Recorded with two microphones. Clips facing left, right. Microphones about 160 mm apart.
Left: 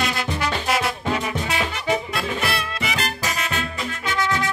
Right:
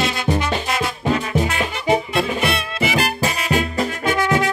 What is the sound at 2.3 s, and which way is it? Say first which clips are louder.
Music: right 4 dB; 20° right (ahead or behind).